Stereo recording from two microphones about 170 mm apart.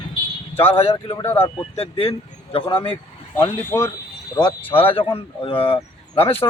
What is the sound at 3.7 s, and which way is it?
Speech, 15° left (ahead or behind).